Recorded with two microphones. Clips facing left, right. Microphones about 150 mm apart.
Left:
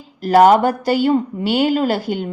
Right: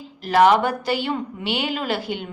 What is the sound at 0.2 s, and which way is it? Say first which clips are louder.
A woman's voice: left 5 dB; 40° left (ahead or behind).